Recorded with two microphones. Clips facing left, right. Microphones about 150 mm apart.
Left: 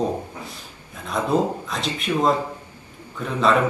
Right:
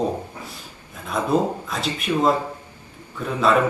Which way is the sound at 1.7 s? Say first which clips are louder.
Right 1 dB; 5° right (ahead or behind).